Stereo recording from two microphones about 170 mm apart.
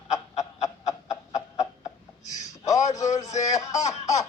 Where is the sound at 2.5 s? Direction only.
20° left (ahead or behind).